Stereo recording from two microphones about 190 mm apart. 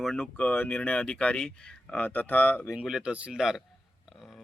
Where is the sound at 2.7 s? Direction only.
5° right (ahead or behind).